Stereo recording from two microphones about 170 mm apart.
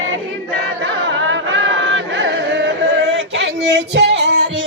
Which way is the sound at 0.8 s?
90° right.